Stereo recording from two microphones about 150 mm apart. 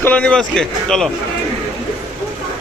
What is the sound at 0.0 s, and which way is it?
A man's voice, 10° left (ahead or behind).